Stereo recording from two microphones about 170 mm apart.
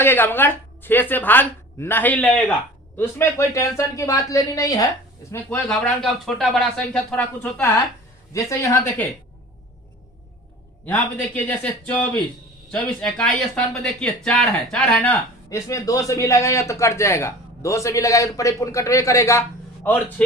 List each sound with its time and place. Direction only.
0.0 s speech: 10° left (ahead or behind)
5.6 s speech: centre (ahead or behind)
8.3 s speech: 20° left (ahead or behind)
10.8 s speech: 10° left (ahead or behind)